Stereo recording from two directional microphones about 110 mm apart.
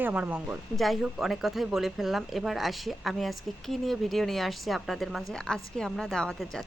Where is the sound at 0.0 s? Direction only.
15° right (ahead or behind).